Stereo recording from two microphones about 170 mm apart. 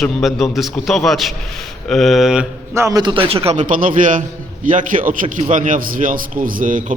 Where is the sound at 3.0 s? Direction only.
30° right (ahead or behind); by 6.9 s 50° right (ahead or behind).